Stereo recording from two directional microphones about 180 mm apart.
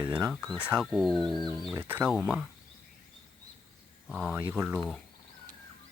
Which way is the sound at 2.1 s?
Centre (ahead or behind).